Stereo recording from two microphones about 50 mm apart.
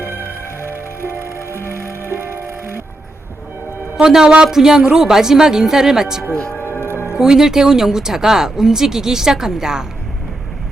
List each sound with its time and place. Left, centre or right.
0.6 s music: right
3.9 s speech: centre
6.7 s music: right
7.2 s speech: centre